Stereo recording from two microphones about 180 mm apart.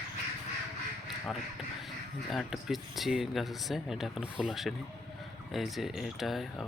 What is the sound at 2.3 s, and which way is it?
Speech, centre (ahead or behind).